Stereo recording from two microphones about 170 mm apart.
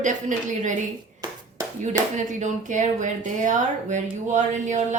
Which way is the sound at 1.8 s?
45° right (ahead or behind).